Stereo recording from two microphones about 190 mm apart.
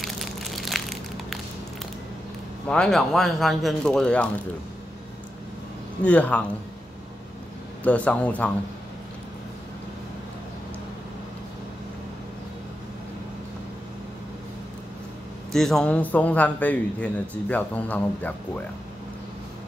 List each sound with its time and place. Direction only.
0.0 s crushing: centre (ahead or behind)
2.7 s speech: 5° left (ahead or behind)
6.0 s a man's voice: 5° left (ahead or behind)
7.8 s a man's voice: 5° left (ahead or behind)
15.5 s a man's voice: centre (ahead or behind)